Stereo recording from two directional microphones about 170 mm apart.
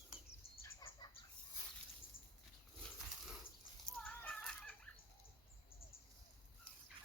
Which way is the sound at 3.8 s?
5° left (ahead or behind).